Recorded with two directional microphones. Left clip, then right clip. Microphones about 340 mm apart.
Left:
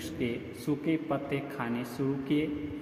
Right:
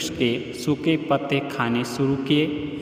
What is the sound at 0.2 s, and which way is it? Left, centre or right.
A man's voice, right.